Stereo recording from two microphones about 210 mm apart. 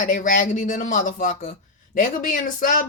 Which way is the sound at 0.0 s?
40° left (ahead or behind).